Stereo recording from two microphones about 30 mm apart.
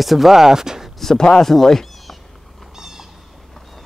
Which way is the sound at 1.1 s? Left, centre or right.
Centre.